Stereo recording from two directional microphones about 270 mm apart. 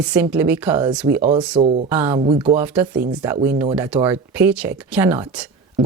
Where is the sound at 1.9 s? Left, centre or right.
Centre.